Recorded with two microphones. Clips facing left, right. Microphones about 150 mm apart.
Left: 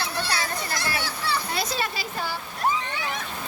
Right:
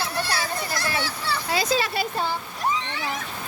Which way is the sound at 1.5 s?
90° right.